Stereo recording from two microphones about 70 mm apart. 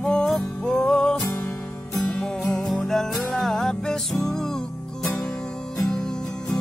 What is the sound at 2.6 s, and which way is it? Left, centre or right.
Music, centre.